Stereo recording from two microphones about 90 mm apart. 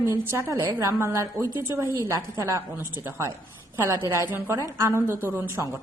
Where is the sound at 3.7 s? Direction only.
25° right (ahead or behind).